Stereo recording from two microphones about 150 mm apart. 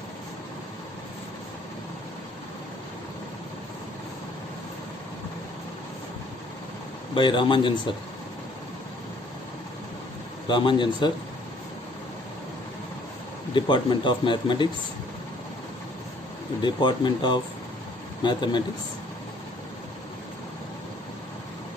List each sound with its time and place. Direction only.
7.2 s speech: 35° left (ahead or behind)
10.5 s speech: 30° left (ahead or behind)
13.6 s speech: 30° left (ahead or behind)
16.6 s speech: 30° left (ahead or behind)